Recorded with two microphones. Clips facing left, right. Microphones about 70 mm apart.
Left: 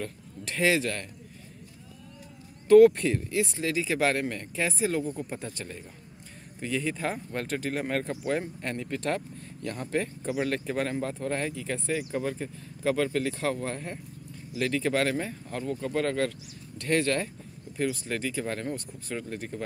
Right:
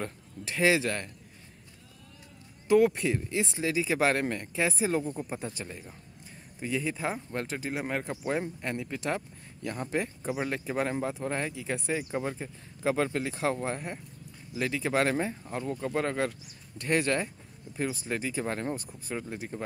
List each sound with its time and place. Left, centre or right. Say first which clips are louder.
0.5 s speech: even; right
2.7 s speech: left 6 dB; centre
3.3 s speech: left 2 dB; right